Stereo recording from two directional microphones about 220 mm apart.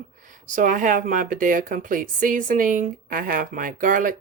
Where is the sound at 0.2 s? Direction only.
35° right (ahead or behind).